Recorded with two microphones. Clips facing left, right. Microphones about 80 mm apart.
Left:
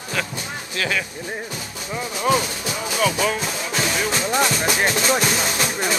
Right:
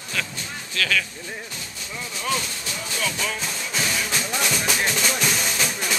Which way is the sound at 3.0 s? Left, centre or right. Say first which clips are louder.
Left 8 dB; left.